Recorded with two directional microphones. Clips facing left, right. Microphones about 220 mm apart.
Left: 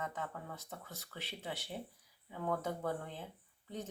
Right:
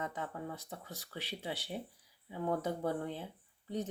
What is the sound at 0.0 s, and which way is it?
Speech, 15° right (ahead or behind).